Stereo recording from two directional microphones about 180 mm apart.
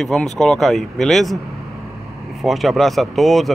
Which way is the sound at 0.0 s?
Centre (ahead or behind).